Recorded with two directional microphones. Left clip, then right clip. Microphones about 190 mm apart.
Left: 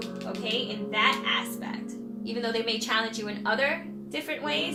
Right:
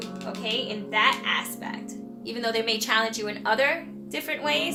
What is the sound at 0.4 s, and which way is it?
A woman's voice, 35° right (ahead or behind).